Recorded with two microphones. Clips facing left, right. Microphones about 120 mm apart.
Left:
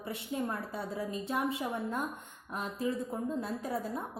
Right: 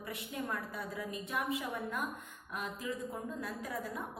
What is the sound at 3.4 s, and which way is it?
Speech, 30° left (ahead or behind).